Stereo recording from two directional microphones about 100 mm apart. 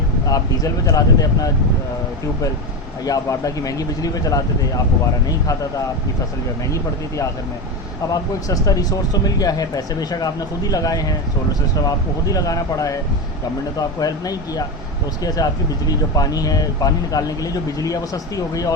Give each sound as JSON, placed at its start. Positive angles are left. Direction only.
{"t": 0.3, "sound": "speech", "side_deg": 35}
{"t": 3.0, "sound": "speech", "side_deg": 35}
{"t": 8.1, "sound": "speech", "side_deg": 35}
{"t": 15.9, "sound": "speech", "side_deg": 40}